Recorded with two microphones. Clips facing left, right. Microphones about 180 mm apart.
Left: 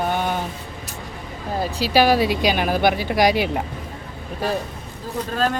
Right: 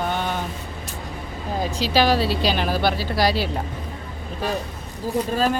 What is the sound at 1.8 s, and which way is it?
Speech, 10° left (ahead or behind).